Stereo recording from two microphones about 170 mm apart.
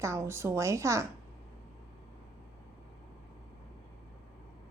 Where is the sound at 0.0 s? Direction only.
15° right (ahead or behind).